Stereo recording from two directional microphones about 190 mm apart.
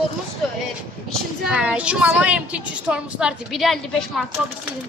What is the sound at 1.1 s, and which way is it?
A woman's voice, centre (ahead or behind).